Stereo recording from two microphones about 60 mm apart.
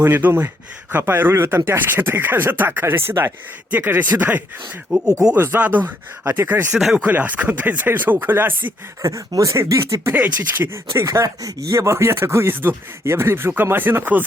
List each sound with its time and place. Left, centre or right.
0.0 s speech: right
6.7 s speech: centre
7.1 s speech: right
9.0 s speech: right
10.1 s speech: right
10.9 s speech: right